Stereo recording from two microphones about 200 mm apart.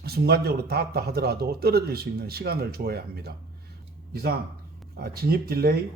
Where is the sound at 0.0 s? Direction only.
50° right (ahead or behind).